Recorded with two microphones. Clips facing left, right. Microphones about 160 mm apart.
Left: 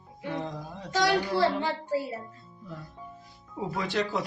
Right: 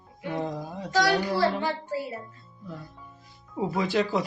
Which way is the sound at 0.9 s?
25° left (ahead or behind).